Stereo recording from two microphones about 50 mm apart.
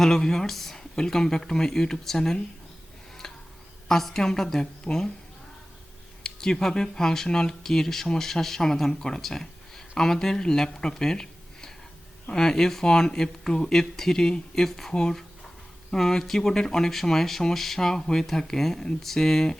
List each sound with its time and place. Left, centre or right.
0.0 s speech: centre
3.8 s speech: centre
6.2 s speech: centre